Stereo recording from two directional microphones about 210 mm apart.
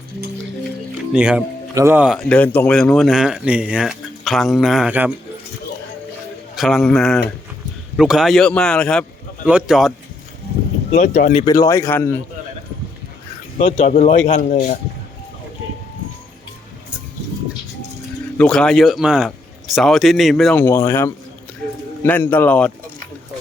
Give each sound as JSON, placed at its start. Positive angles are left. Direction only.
{"t": 1.1, "sound": "speech", "side_deg": -5}
{"t": 6.6, "sound": "speech", "side_deg": 0}
{"t": 10.9, "sound": "speech", "side_deg": 35}
{"t": 11.4, "sound": "speech", "side_deg": 15}
{"t": 13.6, "sound": "speech", "side_deg": 30}
{"t": 18.3, "sound": "speech", "side_deg": 5}